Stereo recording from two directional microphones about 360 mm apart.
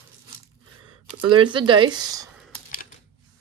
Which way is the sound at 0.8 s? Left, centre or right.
Right.